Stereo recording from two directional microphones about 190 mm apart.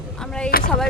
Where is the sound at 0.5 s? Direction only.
50° left (ahead or behind).